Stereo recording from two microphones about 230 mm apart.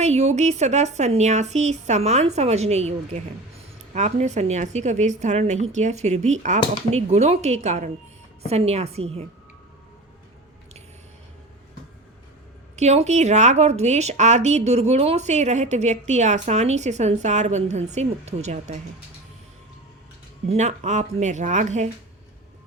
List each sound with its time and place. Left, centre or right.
0.0 s a woman's voice: right
12.7 s a woman's voice: right
20.5 s a woman's voice: right